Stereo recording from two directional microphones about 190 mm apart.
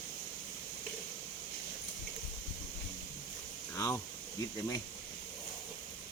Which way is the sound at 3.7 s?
15° left (ahead or behind).